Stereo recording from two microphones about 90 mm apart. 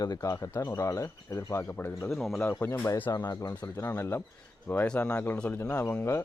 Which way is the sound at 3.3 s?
35° left (ahead or behind).